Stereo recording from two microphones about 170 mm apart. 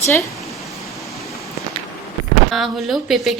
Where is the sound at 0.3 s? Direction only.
Centre (ahead or behind).